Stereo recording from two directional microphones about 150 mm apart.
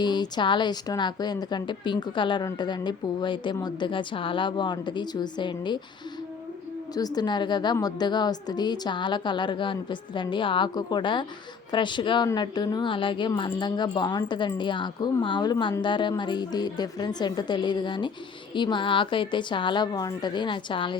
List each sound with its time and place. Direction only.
0.0 s a woman's voice: 30° left (ahead or behind)
6.9 s a woman's voice: 25° left (ahead or behind)